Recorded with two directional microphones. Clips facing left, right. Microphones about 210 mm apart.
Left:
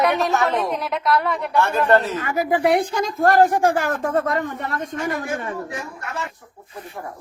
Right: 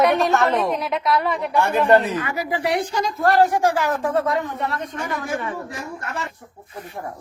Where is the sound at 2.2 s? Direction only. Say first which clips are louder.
Left 5 dB; 50° left (ahead or behind).